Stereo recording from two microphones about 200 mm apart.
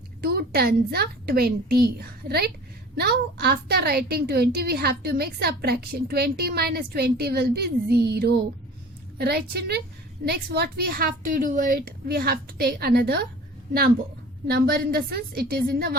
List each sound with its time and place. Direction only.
0.2 s a woman's voice: 50° right (ahead or behind)
14.4 s a woman's voice: 50° right (ahead or behind)